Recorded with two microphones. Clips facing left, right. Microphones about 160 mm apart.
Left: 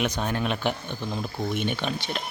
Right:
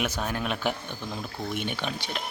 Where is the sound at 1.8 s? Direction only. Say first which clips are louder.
Left 3 dB; 10° right (ahead or behind).